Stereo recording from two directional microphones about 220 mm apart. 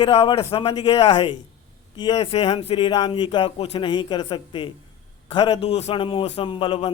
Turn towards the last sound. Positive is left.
turn(degrees=25)  # may be behind; listen again after turning